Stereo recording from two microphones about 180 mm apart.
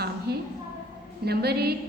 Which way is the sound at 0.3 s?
65° right (ahead or behind).